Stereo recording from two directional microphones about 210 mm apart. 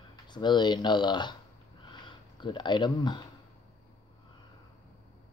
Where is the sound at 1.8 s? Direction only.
20° left (ahead or behind).